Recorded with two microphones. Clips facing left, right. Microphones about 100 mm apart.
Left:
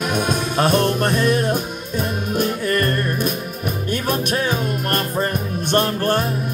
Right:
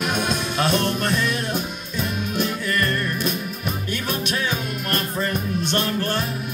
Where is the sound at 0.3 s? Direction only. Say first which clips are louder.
Left 6 dB; 50° left (ahead or behind).